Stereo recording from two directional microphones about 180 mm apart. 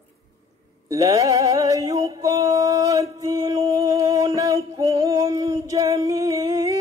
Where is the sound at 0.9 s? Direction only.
20° right (ahead or behind).